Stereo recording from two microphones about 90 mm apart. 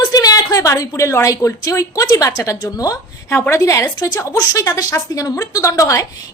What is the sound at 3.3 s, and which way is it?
Speech, 20° left (ahead or behind).